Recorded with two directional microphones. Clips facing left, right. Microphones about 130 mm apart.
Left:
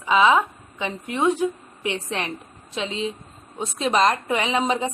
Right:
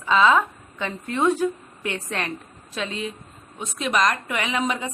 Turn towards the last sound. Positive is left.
turn(degrees=30)  # may be behind; listen again after turning